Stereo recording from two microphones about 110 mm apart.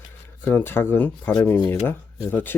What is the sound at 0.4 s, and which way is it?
Speech, 20° left (ahead or behind).